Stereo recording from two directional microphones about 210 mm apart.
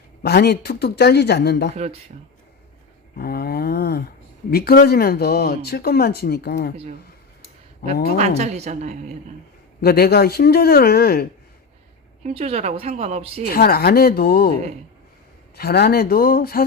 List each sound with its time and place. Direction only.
0.2 s speech: 50° left (ahead or behind)
1.7 s a woman's voice: 30° right (ahead or behind)
3.2 s speech: 45° left (ahead or behind)
7.8 s speech: 50° left (ahead or behind)
8.2 s a woman's voice: 30° right (ahead or behind)
9.8 s speech: 50° left (ahead or behind)
12.2 s speech: 30° right (ahead or behind)
13.5 s speech: 45° left (ahead or behind)
15.5 s speech: 50° left (ahead or behind)